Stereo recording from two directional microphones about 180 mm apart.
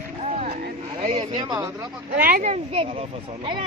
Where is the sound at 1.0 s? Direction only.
25° right (ahead or behind).